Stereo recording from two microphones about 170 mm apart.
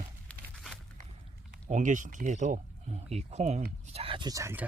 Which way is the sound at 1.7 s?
50° right (ahead or behind).